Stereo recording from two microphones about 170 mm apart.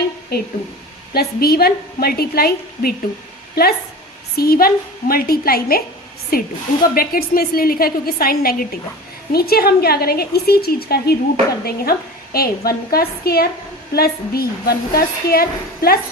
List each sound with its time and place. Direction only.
0.3 s a woman's voice: 70° left (ahead or behind)